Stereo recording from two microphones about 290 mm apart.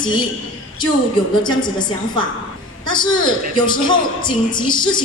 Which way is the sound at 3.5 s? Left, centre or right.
Centre.